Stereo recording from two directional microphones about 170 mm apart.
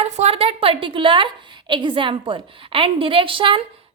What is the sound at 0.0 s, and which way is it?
A woman's voice, 40° right (ahead or behind).